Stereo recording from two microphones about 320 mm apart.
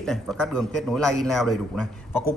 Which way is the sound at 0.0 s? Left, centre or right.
Centre.